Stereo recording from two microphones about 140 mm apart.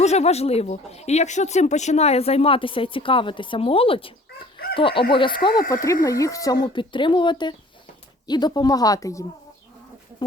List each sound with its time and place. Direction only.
0.0 s speech: 50° left (ahead or behind); by 5.6 s 35° left (ahead or behind)
5.7 s speech: 25° left (ahead or behind)